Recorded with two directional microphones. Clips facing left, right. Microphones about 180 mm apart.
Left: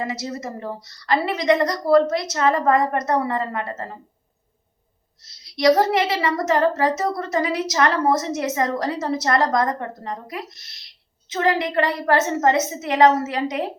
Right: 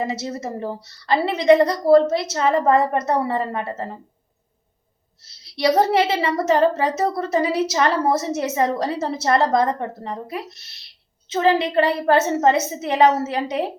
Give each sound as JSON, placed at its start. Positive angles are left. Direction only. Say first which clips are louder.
{"t": 0.0, "sound": "a woman's voice", "louder": "right 2 dB", "side_deg": -25}
{"t": 5.5, "sound": "a woman's voice", "louder": "even", "side_deg": -30}